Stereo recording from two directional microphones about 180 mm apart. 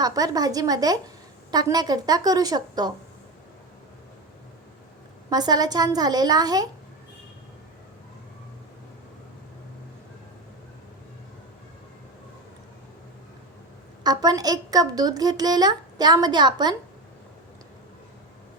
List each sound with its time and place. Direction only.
0.0 s a woman's voice: 20° right (ahead or behind)
5.3 s a woman's voice: 20° right (ahead or behind)
14.0 s a woman's voice: 20° right (ahead or behind)